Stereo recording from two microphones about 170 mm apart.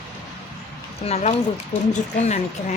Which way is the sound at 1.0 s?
40° left (ahead or behind).